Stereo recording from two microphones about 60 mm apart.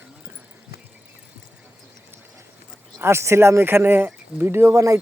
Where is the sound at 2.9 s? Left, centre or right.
Right.